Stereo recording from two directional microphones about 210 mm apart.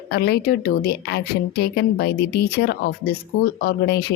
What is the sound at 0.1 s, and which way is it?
A woman's voice, 50° left (ahead or behind).